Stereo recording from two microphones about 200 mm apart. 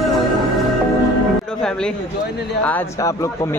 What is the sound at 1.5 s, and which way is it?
Music, 5° left (ahead or behind).